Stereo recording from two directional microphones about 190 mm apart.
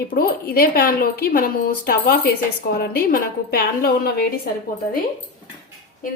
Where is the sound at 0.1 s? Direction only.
50° left (ahead or behind).